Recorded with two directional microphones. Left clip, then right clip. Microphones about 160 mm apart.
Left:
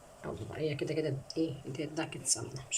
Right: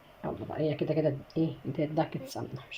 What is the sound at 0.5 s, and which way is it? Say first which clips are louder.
Speech: right 4 dB; 15° right (ahead or behind).